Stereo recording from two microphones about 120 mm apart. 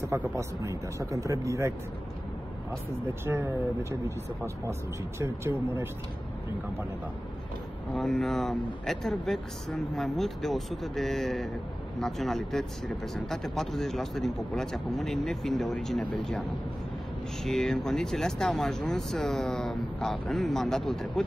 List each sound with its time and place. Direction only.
0.4 s speech: 25° right (ahead or behind)
3.3 s speech: 20° right (ahead or behind)
5.2 s speech: 20° right (ahead or behind)
7.9 s speech: 5° left (ahead or behind)